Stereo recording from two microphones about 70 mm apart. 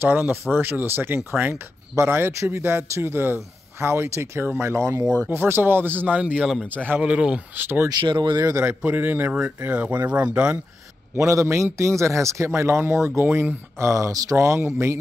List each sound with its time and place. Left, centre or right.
0.0 s speech: right
6.4 s speech: centre
6.9 s speech: centre
7.5 s speech: right
7.9 s speech: right
8.6 s speech: right
11.1 s a man's voice: right